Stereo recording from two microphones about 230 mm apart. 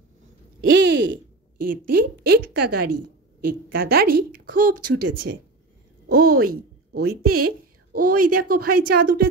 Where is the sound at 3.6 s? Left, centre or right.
Right.